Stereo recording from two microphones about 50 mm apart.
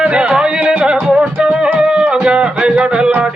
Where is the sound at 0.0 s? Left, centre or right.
Right.